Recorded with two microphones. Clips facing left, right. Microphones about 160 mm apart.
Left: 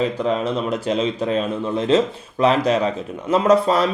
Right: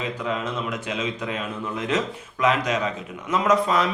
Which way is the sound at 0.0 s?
35° left (ahead or behind).